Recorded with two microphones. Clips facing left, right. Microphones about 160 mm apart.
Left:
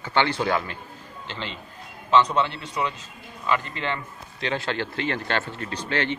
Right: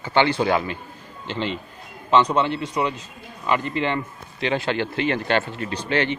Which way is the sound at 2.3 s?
15° right (ahead or behind).